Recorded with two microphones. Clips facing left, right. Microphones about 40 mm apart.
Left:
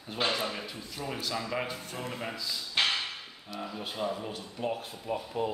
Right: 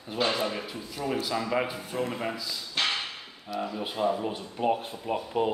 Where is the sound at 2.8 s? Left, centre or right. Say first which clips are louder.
Even; centre.